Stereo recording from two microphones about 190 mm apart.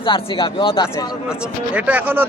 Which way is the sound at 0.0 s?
25° left (ahead or behind).